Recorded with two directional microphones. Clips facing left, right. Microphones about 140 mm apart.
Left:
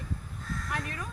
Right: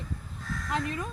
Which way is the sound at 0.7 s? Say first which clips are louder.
Right 7 dB; 25° right (ahead or behind).